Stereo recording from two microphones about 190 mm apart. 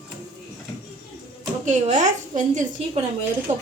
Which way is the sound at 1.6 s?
40° right (ahead or behind).